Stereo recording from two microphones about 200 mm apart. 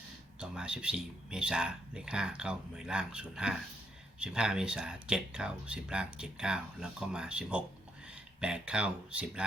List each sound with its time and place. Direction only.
0.3 s speech: 5° right (ahead or behind)